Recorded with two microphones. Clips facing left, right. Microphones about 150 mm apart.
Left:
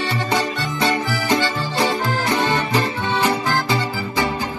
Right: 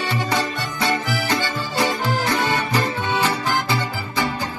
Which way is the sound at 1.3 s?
20° left (ahead or behind).